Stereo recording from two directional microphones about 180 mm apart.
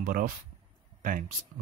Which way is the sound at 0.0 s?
50° right (ahead or behind).